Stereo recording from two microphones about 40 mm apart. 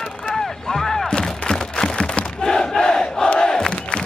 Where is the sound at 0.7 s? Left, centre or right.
Centre.